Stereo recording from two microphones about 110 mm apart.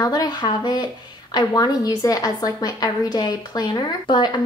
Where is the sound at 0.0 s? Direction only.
35° left (ahead or behind).